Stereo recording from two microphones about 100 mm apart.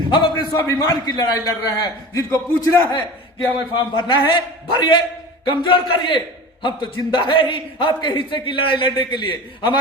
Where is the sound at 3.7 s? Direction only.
55° left (ahead or behind).